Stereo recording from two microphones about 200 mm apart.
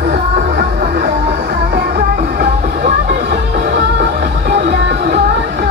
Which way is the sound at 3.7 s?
55° right (ahead or behind).